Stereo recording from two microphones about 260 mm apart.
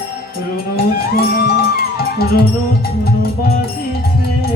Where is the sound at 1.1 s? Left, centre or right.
Left.